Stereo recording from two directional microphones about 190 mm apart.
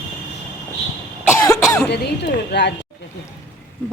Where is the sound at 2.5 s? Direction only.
65° left (ahead or behind).